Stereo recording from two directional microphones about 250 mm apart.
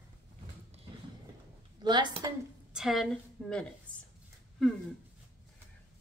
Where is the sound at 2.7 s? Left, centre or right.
Centre.